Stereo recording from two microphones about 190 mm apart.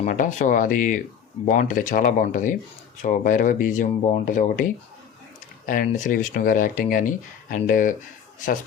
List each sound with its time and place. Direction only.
0.0 s speech: 40° left (ahead or behind)